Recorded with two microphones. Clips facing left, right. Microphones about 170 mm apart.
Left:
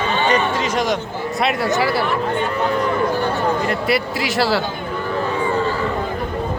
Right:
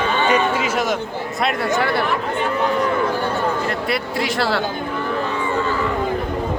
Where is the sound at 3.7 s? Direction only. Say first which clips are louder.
Left 3 dB; centre (ahead or behind).